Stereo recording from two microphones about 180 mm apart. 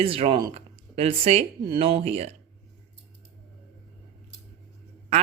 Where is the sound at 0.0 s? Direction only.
30° right (ahead or behind).